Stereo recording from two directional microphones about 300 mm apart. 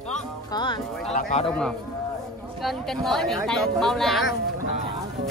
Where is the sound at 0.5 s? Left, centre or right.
Centre.